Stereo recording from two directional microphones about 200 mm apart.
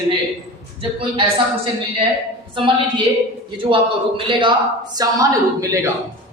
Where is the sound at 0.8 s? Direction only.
25° right (ahead or behind).